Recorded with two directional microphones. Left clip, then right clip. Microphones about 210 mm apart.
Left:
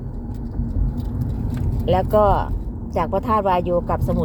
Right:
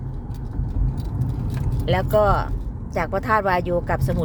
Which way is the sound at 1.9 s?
5° left (ahead or behind).